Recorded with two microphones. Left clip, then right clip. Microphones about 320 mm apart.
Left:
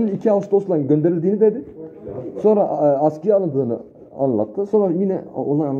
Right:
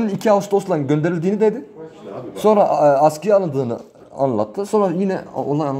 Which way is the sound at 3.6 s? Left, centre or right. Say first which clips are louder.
Left 1 dB; right.